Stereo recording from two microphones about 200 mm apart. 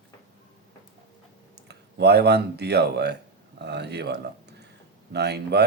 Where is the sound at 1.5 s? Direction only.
55° right (ahead or behind).